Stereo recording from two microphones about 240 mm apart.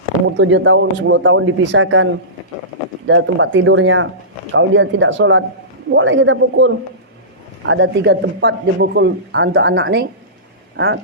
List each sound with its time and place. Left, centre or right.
0.3 s speech: right
3.1 s speech: right